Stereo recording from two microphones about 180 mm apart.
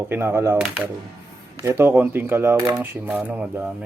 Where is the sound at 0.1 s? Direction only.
15° right (ahead or behind).